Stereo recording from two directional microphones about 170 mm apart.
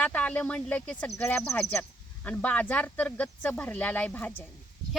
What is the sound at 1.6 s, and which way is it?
Speech, 5° left (ahead or behind).